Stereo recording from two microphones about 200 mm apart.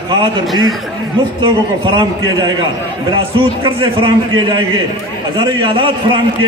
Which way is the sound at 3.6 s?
25° right (ahead or behind).